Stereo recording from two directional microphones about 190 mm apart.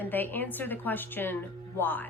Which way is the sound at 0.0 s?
10° left (ahead or behind).